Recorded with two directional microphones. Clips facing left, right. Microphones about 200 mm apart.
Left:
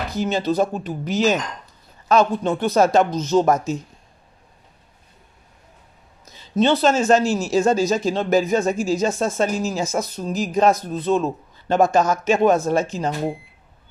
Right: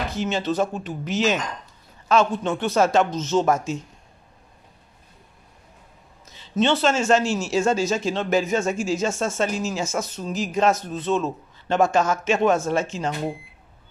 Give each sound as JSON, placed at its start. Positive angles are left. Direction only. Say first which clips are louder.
{"t": 0.1, "sound": "speech", "louder": "left 6 dB", "side_deg": 35}
{"t": 6.5, "sound": "speech", "louder": "left 3 dB", "side_deg": 35}